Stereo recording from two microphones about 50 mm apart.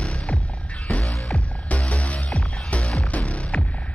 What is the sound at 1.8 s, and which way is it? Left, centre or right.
Music, centre.